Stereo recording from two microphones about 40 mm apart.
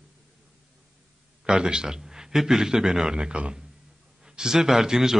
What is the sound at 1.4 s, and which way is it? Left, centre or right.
A man's voice, centre.